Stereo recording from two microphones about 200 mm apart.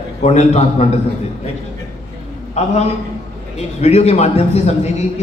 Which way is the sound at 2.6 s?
35° left (ahead or behind).